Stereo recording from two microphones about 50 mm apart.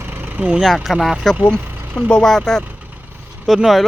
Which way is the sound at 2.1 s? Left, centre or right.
Centre.